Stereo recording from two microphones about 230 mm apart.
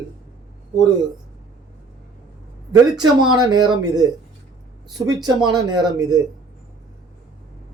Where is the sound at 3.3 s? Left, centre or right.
Centre.